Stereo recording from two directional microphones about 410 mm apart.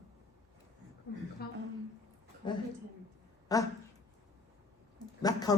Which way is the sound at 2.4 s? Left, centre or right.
Centre.